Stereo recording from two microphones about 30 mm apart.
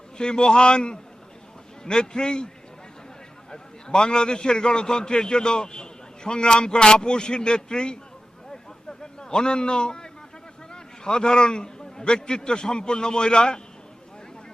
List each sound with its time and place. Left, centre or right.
0.2 s a man's voice: left
3.5 s a man's voice: left
8.9 s a sound: left
10.7 s a man's voice: left